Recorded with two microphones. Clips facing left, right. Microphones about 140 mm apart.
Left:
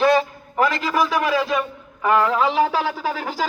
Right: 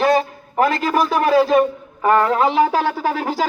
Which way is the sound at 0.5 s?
50° right (ahead or behind).